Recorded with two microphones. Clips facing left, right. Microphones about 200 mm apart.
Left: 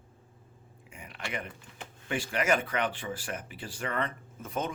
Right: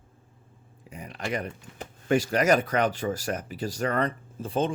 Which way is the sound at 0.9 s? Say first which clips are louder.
Right 7 dB; 35° right (ahead or behind).